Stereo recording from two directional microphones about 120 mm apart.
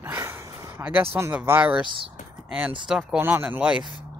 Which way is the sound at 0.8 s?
15° right (ahead or behind).